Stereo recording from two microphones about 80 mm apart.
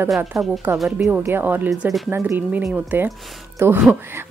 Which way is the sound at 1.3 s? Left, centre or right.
Right.